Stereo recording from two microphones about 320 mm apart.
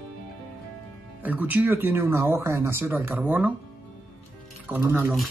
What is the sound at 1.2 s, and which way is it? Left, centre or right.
Speech, centre.